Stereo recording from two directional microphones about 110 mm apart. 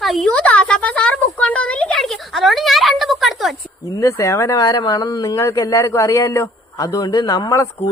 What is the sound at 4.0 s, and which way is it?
Speech, 25° left (ahead or behind).